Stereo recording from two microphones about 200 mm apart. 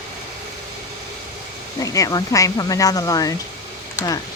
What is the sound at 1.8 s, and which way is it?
Speech, 15° left (ahead or behind).